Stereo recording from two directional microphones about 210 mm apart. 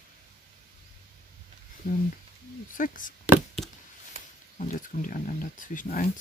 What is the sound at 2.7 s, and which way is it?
Speech, 40° left (ahead or behind).